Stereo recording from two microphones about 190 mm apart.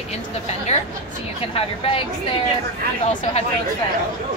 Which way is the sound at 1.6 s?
30° left (ahead or behind).